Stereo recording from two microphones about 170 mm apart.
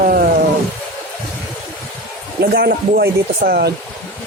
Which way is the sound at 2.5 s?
65° right (ahead or behind).